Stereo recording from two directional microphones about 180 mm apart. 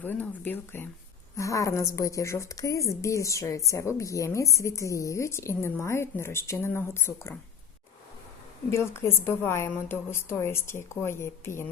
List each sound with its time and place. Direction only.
0.0 s a woman's voice: 10° left (ahead or behind)
8.7 s a woman's voice: 15° left (ahead or behind)